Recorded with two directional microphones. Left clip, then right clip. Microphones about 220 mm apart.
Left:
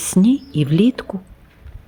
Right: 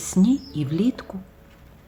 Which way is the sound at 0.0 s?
35° left (ahead or behind).